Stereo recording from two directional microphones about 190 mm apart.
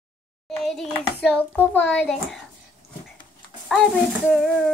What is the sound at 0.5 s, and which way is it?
A child's voice, centre (ahead or behind).